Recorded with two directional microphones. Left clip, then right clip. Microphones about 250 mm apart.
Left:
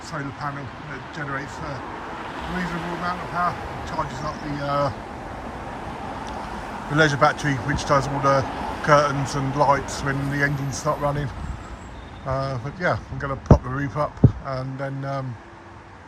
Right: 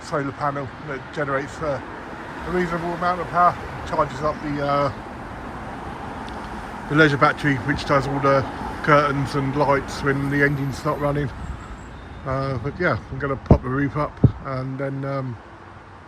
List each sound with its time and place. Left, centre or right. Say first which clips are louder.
0.1 s speech: right 7 dB; centre
6.9 s speech: right 2 dB; centre
8.5 s a sound: left 1 dB; centre
8.8 s speech: right 1 dB; centre
12.3 s speech: right 1 dB; centre